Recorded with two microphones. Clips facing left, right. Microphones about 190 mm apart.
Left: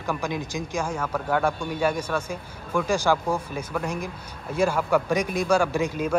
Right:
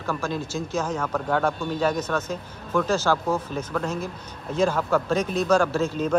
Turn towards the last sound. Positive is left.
turn(degrees=10)  # may be behind; listen again after turning